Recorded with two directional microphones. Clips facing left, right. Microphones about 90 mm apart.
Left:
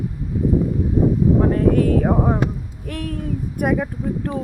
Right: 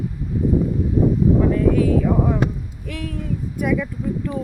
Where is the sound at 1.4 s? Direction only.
55° left (ahead or behind).